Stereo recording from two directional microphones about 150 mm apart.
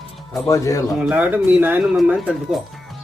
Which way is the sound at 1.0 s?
10° right (ahead or behind).